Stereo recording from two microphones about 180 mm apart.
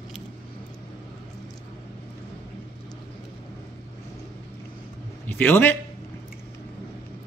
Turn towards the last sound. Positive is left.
turn(degrees=10)  # may be behind; listen again after turning